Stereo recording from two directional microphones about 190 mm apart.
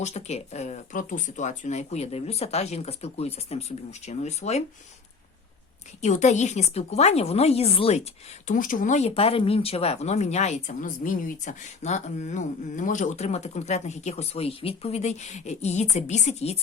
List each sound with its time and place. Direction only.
0.0 s speech: 35° left (ahead or behind)
6.0 s speech: 40° left (ahead or behind)
8.4 s speech: 45° left (ahead or behind)